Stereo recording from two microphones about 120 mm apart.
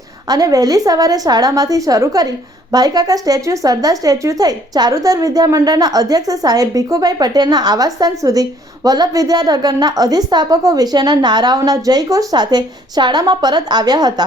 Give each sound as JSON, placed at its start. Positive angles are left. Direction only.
{"t": 0.3, "sound": "speech", "side_deg": -30}